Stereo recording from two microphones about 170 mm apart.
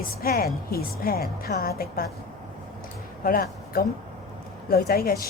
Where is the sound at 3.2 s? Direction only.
60° left (ahead or behind).